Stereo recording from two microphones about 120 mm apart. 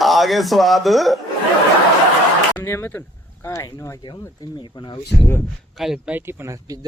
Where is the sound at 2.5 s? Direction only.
20° left (ahead or behind).